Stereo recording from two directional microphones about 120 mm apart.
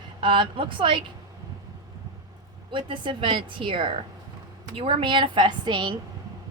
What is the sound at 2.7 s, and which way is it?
Speech, 45° right (ahead or behind).